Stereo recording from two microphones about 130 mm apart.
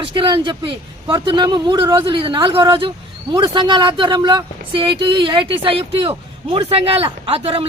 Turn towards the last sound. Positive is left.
turn(degrees=-50)  # may be behind; listen again after turning